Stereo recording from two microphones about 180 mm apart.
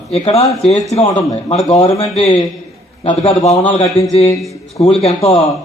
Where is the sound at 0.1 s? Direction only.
35° left (ahead or behind).